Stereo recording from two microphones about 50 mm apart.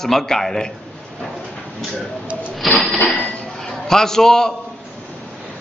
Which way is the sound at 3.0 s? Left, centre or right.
Left.